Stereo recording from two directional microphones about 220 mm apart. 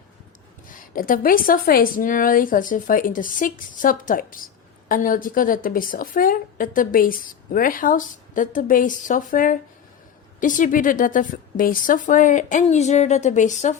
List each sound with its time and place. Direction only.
0.7 s a woman's voice: 40° left (ahead or behind)